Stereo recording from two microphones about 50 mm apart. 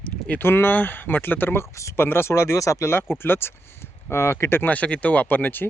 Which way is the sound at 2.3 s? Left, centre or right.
Left.